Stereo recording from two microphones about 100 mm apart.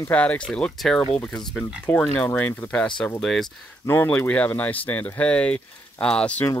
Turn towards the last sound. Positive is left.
turn(degrees=10)  # may be behind; listen again after turning